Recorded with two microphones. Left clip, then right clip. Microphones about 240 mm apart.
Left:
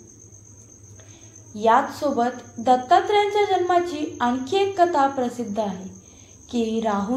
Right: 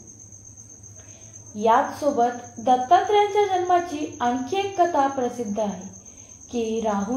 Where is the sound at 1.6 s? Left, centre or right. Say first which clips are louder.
Left 1 dB; left.